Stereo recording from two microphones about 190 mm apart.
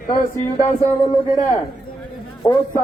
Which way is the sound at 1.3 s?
20° left (ahead or behind).